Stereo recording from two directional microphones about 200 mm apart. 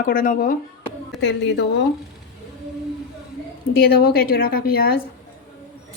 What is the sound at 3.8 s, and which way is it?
A woman's voice, 50° left (ahead or behind).